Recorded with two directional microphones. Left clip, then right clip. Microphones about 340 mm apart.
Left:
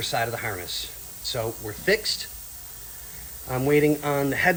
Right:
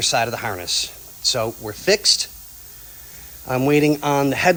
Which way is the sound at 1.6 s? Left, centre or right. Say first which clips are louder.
Right 7 dB; centre.